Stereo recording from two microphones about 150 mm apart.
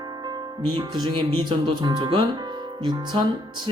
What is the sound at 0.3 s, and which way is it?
Speech, 25° right (ahead or behind).